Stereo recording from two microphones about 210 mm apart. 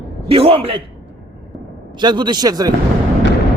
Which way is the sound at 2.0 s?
20° right (ahead or behind).